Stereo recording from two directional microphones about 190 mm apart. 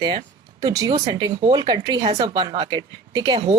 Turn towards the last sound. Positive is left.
turn(degrees=-20)  # may be behind; listen again after turning